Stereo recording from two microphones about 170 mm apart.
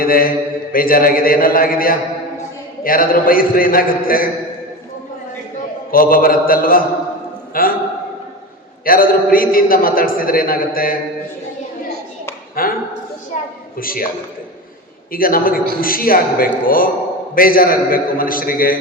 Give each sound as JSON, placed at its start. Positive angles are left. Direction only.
{"t": 0.0, "sound": "a man's voice", "side_deg": 55}
{"t": 5.9, "sound": "a man's voice", "side_deg": 55}
{"t": 8.8, "sound": "a man's voice", "side_deg": 55}
{"t": 12.6, "sound": "a sound", "side_deg": 55}
{"t": 13.7, "sound": "a man's voice", "side_deg": 55}
{"t": 15.1, "sound": "a man's voice", "side_deg": 60}